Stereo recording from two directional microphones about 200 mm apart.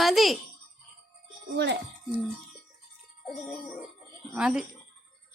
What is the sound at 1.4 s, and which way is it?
Speech, 55° right (ahead or behind).